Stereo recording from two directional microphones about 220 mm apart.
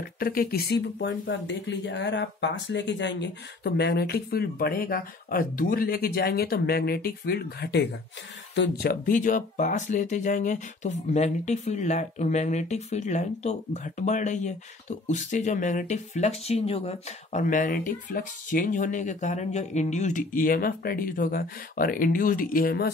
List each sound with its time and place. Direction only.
0.2 s speech: 40° left (ahead or behind)